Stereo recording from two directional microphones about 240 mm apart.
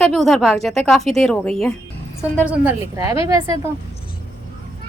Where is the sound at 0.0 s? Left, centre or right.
Centre.